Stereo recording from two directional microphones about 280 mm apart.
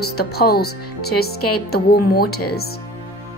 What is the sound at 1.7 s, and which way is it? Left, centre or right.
Speech, left.